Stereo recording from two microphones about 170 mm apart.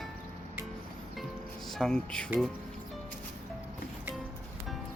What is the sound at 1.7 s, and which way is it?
Speech, 5° left (ahead or behind).